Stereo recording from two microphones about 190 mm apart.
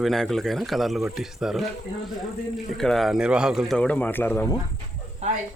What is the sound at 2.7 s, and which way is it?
A man's voice, centre (ahead or behind).